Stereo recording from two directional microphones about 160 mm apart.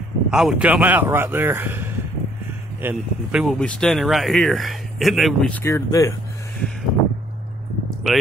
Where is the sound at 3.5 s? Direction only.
5° left (ahead or behind).